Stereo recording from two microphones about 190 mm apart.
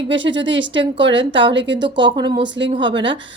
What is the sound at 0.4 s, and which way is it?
A woman's voice, 75° right (ahead or behind).